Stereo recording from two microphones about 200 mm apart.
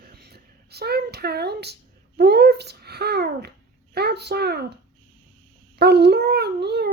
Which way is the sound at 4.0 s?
55° right (ahead or behind).